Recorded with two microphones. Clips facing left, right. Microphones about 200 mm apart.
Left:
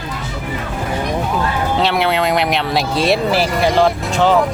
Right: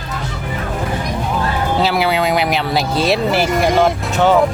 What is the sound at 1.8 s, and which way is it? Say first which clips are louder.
Speech: even; centre (ahead or behind).